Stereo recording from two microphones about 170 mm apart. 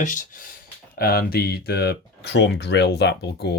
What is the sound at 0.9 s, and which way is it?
Speech, 65° left (ahead or behind).